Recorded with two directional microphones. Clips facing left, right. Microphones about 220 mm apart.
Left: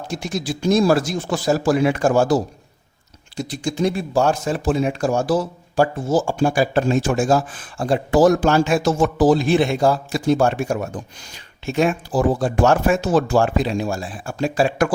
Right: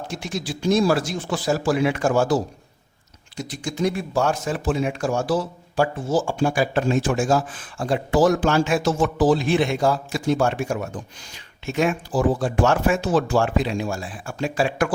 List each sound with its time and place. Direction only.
0.1 s speech: 40° left (ahead or behind)